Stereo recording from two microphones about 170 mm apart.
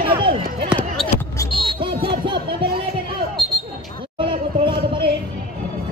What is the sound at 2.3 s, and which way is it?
Music, 70° right (ahead or behind).